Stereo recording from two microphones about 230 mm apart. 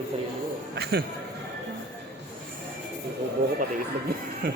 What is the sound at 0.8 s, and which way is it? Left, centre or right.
Speech, right.